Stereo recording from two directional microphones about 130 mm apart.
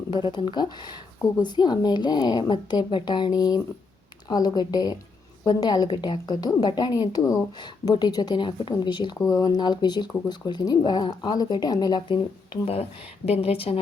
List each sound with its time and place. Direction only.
0.1 s speech: 40° left (ahead or behind)
13.2 s speech: 50° left (ahead or behind)